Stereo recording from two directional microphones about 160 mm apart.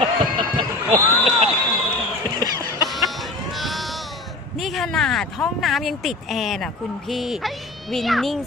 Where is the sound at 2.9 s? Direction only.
Centre (ahead or behind).